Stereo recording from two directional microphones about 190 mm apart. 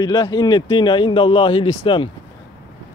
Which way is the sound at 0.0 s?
20° left (ahead or behind).